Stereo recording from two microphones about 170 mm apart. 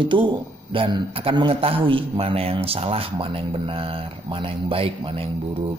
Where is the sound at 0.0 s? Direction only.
30° right (ahead or behind).